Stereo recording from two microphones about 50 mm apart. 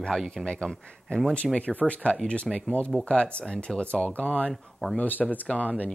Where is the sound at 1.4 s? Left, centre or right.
Centre.